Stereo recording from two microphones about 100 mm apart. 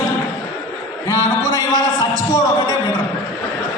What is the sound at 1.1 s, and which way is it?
Speech, 35° left (ahead or behind).